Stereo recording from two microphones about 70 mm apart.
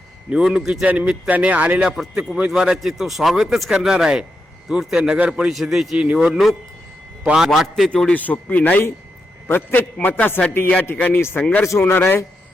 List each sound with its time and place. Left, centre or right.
0.3 s speech: centre
1.9 s speech: centre
5.5 s a man's voice: centre
8.1 s a man's voice: left
9.5 s a man's voice: left
11.2 s speech: left
11.9 s speech: left